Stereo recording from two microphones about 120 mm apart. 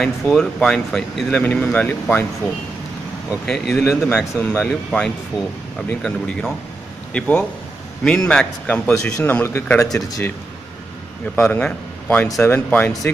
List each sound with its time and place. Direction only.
0.0 s speech: 5° left (ahead or behind)
3.4 s speech: 5° left (ahead or behind); by 9.8 s 20° left (ahead or behind)
9.8 s speech: centre (ahead or behind)
11.3 s speech: 10° left (ahead or behind)